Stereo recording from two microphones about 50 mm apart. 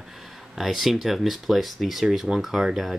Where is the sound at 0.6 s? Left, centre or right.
Centre.